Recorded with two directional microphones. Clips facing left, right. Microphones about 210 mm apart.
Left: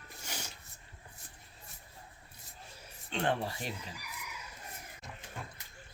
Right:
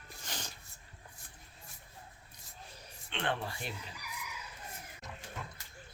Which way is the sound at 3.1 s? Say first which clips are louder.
Left 4 dB; 40° left (ahead or behind).